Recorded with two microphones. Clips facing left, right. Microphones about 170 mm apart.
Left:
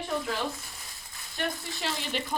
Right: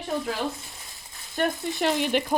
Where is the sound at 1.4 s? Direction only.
45° right (ahead or behind).